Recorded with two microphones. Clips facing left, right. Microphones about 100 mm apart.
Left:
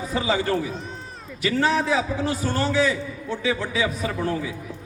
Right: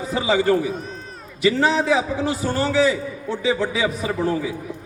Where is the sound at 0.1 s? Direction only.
20° right (ahead or behind).